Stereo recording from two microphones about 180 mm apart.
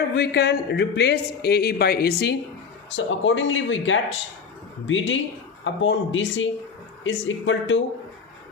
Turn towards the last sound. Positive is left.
turn(degrees=90)